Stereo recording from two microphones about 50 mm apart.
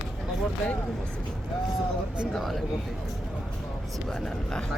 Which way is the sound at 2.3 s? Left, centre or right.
Centre.